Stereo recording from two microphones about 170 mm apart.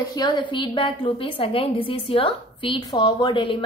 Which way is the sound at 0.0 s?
25° left (ahead or behind).